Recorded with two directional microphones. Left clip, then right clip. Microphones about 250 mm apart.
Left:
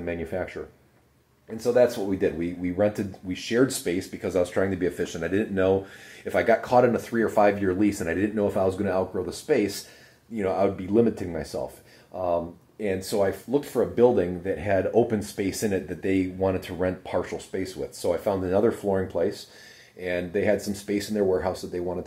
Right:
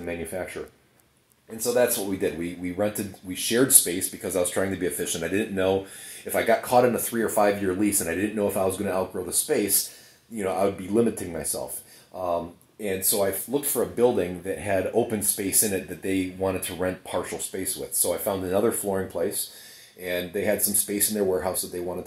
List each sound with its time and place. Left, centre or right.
0.1 s speech: right
4.2 s speech: right
12.8 s speech: right
21.1 s speech: right